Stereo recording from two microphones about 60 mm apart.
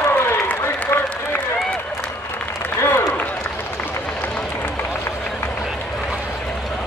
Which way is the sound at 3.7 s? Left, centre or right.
Left.